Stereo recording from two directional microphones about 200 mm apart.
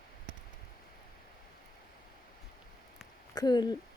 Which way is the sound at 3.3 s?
20° left (ahead or behind).